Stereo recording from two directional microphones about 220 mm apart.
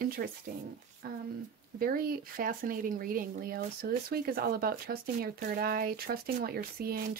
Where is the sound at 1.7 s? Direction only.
40° right (ahead or behind).